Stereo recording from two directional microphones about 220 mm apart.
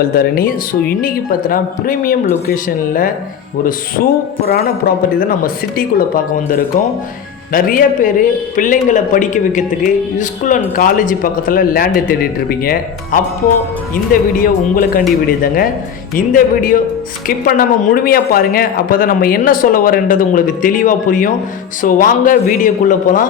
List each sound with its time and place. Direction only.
0.0 s speech: 45° left (ahead or behind)
16.1 s speech: 40° left (ahead or behind)